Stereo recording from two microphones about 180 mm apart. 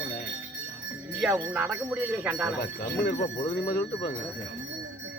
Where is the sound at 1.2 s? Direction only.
10° right (ahead or behind).